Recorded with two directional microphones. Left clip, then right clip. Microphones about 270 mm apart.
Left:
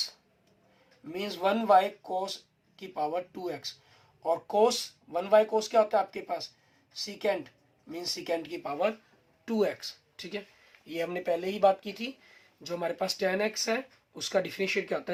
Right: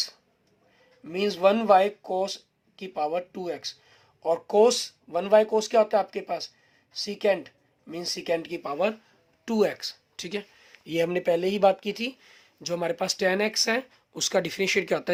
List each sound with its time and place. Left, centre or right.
1.0 s speech: right